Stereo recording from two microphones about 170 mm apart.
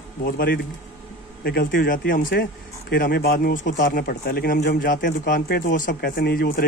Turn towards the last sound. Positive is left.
turn(degrees=60)  # may be behind; listen again after turning